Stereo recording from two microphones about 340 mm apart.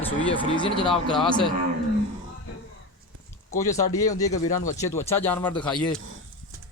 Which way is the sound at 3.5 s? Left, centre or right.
Centre.